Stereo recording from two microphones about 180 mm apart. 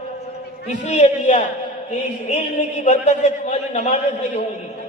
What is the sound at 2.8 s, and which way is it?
A man's voice, 40° left (ahead or behind).